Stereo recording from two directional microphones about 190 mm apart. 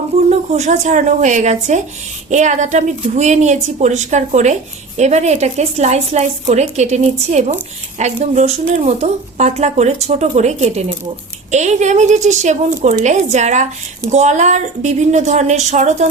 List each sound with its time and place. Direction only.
0.3 s speech: 35° right (ahead or behind)